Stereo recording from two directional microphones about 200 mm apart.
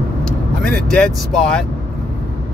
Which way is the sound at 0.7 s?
5° left (ahead or behind).